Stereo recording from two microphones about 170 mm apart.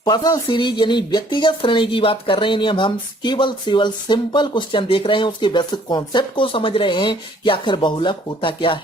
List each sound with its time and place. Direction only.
0.0 s speech: 25° left (ahead or behind)